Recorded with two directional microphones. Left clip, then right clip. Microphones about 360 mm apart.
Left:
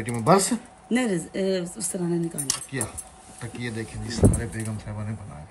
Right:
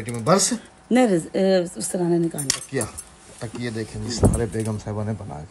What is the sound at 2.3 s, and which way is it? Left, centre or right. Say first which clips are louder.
Speech: right 5 dB; centre.